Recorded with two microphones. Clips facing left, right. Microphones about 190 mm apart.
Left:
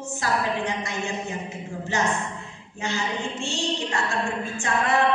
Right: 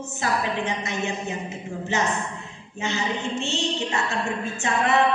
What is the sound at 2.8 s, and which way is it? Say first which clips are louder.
A woman's voice: right 1 dB; 20° right (ahead or behind).